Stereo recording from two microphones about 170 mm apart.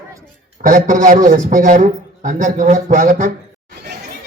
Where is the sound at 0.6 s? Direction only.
50° right (ahead or behind).